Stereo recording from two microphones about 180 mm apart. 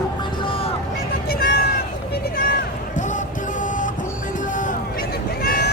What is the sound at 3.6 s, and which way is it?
Train, 45° left (ahead or behind).